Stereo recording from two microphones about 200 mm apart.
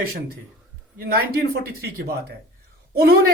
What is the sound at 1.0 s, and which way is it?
Speech, 55° right (ahead or behind).